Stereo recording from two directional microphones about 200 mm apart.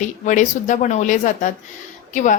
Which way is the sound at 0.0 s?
35° left (ahead or behind).